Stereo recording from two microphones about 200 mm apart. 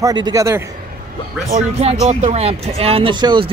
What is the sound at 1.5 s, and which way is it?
Speech, 35° right (ahead or behind).